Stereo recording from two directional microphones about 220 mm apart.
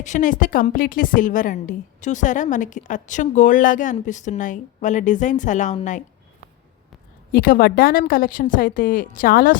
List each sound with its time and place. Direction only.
0.0 s a woman's voice: 35° left (ahead or behind)
7.3 s a woman's voice: 40° left (ahead or behind)